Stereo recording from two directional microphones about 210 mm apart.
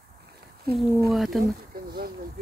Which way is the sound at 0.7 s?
45° right (ahead or behind).